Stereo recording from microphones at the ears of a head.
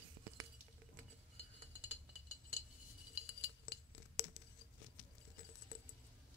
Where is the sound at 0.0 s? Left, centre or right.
Right.